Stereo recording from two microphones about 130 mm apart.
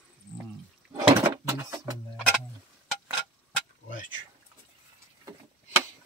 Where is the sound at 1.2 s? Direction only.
25° right (ahead or behind).